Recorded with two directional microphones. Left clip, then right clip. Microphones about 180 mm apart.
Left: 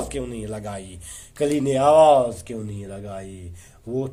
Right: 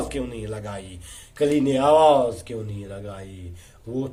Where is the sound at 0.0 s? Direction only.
45° left (ahead or behind).